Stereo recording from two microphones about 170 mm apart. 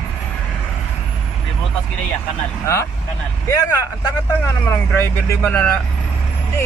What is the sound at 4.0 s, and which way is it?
Speech, 15° left (ahead or behind).